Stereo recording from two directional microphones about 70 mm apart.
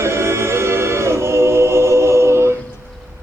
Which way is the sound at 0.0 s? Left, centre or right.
Right.